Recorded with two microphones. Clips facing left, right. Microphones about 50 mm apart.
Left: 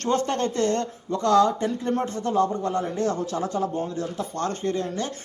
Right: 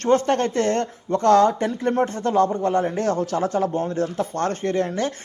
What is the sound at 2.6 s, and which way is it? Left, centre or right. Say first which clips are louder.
Speech: right 4 dB; right.